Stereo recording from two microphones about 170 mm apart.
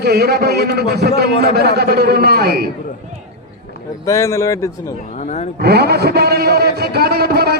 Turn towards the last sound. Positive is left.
turn(degrees=-70)  # may be behind; listen again after turning